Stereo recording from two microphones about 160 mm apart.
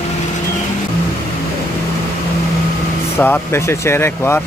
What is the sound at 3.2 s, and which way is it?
Speech, 15° left (ahead or behind).